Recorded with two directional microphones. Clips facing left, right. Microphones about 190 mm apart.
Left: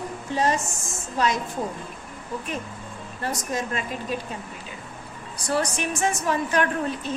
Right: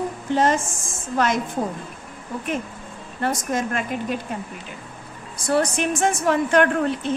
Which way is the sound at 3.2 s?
55° right (ahead or behind).